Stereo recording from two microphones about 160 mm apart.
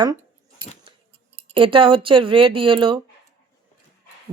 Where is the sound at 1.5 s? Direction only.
35° right (ahead or behind).